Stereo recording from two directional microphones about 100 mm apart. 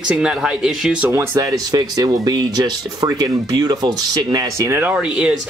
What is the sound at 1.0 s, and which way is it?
Speech, 30° right (ahead or behind).